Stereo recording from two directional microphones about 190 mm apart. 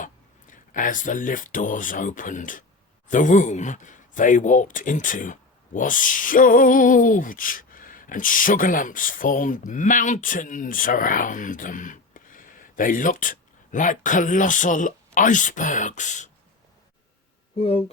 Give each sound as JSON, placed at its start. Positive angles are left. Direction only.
{"t": 0.5, "sound": "speech", "side_deg": 45}
{"t": 17.6, "sound": "speech", "side_deg": 30}